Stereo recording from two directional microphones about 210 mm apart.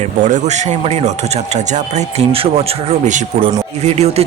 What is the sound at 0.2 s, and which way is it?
Speech, 35° right (ahead or behind).